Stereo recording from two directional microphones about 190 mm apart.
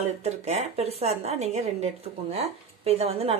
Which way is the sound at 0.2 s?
35° right (ahead or behind).